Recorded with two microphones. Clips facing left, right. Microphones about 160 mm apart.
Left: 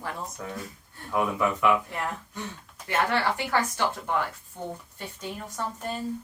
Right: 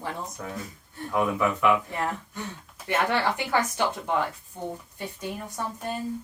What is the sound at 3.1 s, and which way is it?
Speech, 20° right (ahead or behind).